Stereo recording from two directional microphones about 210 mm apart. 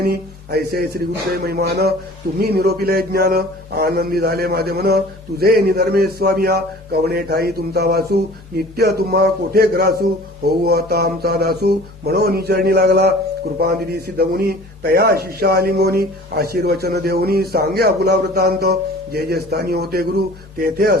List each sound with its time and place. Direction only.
0.0 s a man's voice: 45° right (ahead or behind)
14.2 s a man's voice: 45° right (ahead or behind)